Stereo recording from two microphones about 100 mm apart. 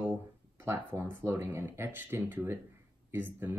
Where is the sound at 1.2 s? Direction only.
25° right (ahead or behind).